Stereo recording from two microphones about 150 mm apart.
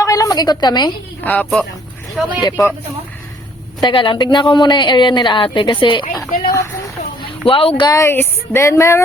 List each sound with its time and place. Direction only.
0.0 s a sound: 25° left (ahead or behind)
1.2 s speech: 10° left (ahead or behind)
2.2 s speech: 5° right (ahead or behind)
3.8 s a woman's voice: 35° left (ahead or behind)
7.4 s a woman's voice: 40° left (ahead or behind)
7.9 s speech: 20° left (ahead or behind)